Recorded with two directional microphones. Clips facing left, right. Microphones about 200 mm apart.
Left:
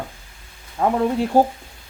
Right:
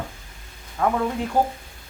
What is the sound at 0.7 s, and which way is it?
Speech, 30° left (ahead or behind).